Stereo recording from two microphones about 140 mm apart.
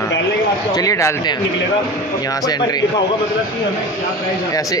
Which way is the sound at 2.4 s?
30° left (ahead or behind).